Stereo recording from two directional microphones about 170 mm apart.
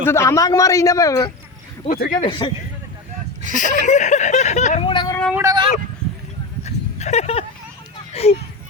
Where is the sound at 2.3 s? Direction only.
25° left (ahead or behind).